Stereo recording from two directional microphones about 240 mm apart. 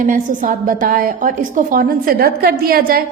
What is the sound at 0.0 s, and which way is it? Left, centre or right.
A woman's voice, right.